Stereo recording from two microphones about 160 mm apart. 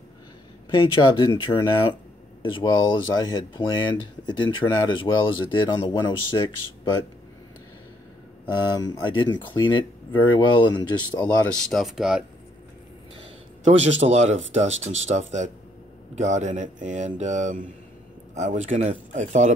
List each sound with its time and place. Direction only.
0.7 s speech: 35° left (ahead or behind)
8.7 s speech: 25° left (ahead or behind)
11.7 s speech: centre (ahead or behind)
13.7 s speech: 45° right (ahead or behind)